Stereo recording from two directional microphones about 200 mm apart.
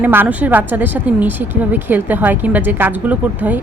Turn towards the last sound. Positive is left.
turn(degrees=-10)  # may be behind; listen again after turning